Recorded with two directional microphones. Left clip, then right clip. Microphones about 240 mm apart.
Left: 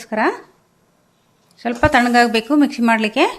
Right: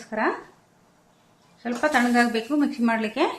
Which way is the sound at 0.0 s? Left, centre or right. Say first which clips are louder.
Left 7 dB; left.